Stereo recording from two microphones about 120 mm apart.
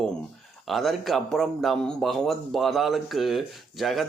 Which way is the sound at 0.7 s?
Centre (ahead or behind).